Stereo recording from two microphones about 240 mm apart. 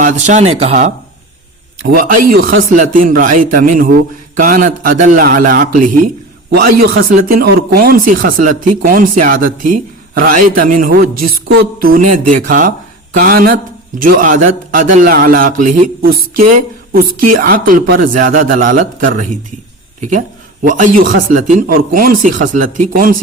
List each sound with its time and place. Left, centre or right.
0.0 s a man's voice: right
11.1 s a woman's voice: right
11.4 s a man's voice: right
17.1 s a woman's voice: right
17.3 s a man's voice: right